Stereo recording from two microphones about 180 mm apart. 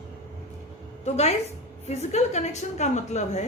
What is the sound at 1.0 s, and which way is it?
A woman's voice, 35° left (ahead or behind).